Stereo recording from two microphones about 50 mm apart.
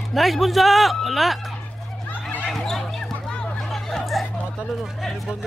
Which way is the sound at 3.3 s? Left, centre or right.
Centre.